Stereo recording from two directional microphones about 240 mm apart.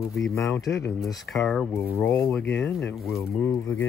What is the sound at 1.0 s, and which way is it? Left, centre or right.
Speech, centre.